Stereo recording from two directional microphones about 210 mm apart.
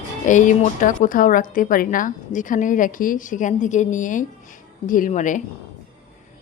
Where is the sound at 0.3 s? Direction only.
35° left (ahead or behind).